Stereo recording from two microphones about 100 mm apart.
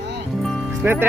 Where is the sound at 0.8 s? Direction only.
20° right (ahead or behind).